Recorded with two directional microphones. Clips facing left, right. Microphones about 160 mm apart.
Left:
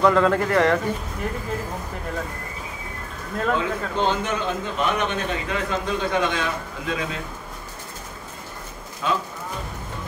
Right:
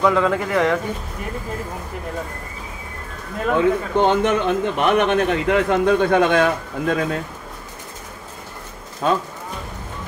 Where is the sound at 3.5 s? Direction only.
60° right (ahead or behind).